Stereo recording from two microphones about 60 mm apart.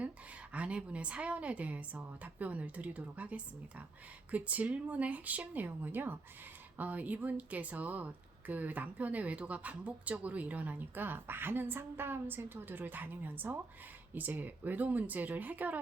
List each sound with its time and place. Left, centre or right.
0.5 s speech: centre